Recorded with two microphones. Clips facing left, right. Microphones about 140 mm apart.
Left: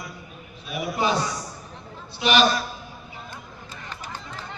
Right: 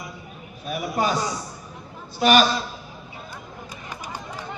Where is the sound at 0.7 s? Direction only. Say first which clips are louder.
Right 1 dB; 45° right (ahead or behind).